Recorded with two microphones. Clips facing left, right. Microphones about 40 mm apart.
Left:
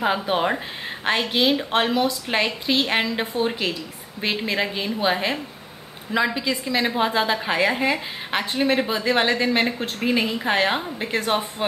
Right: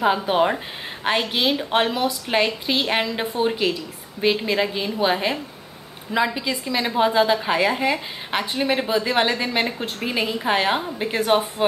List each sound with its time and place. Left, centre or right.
0.0 s a woman's voice: centre